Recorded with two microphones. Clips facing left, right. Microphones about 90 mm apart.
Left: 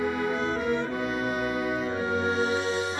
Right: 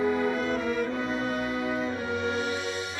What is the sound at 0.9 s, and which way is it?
Music, 30° right (ahead or behind).